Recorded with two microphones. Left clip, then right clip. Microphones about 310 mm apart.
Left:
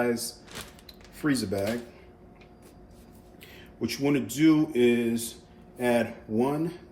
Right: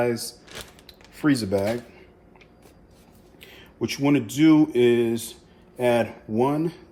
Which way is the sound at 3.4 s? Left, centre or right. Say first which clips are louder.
Right 4 dB; right.